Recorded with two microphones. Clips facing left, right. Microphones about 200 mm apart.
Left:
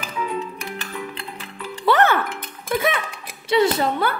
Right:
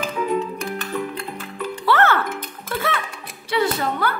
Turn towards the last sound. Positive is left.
turn(degrees=25)  # may be behind; listen again after turning